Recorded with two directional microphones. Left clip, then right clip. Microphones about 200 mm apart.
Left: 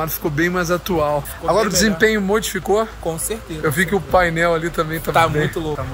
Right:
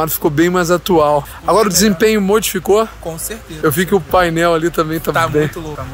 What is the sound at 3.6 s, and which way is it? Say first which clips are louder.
Speech: right 5 dB; 40° right (ahead or behind).